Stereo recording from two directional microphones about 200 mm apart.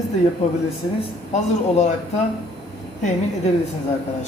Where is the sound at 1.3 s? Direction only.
35° left (ahead or behind).